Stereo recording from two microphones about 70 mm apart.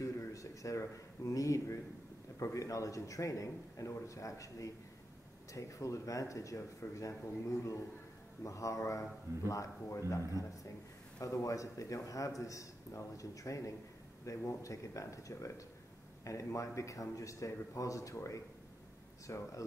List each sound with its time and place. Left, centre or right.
0.0 s a man's voice: left
8.5 s a man's voice: left